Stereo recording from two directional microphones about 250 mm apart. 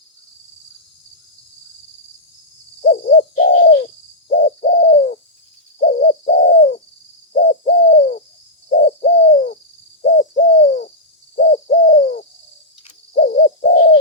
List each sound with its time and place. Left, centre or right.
2.8 s owl: left
3.2 s bird: left
4.8 s bird: left
5.8 s owl: left
6.3 s bird: left
7.3 s owl: left
7.7 s bird: left
8.7 s owl: left
9.0 s bird: left
10.0 s bird: left
11.3 s owl: left
11.9 s bird: left
13.1 s owl: left